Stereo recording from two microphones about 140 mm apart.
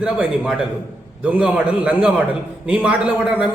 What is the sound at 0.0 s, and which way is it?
A man's voice, 5° right (ahead or behind).